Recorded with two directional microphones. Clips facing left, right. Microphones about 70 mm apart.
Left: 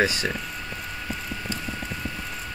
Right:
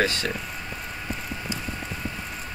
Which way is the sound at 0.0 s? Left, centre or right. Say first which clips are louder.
Left 1 dB; centre.